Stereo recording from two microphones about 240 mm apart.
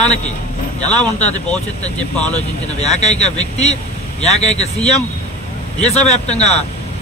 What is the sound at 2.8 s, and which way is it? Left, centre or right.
Speech, left.